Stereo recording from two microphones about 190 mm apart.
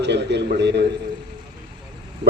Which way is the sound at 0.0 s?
65° right (ahead or behind).